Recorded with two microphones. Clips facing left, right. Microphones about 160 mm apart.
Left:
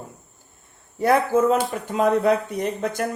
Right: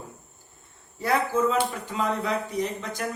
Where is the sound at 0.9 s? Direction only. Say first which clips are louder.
Left 6 dB; 55° left (ahead or behind).